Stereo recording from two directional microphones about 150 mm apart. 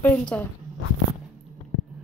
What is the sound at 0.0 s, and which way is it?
Speech, 5° left (ahead or behind).